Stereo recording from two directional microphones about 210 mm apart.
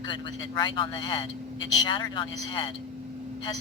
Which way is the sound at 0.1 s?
20° left (ahead or behind).